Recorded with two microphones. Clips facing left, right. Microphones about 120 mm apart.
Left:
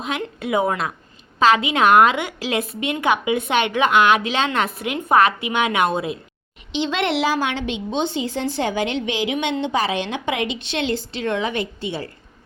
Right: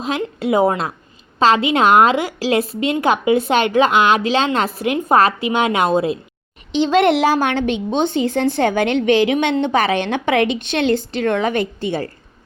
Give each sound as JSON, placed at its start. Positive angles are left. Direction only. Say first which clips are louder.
{"t": 0.0, "sound": "a woman's voice", "louder": "right 5 dB", "side_deg": -30}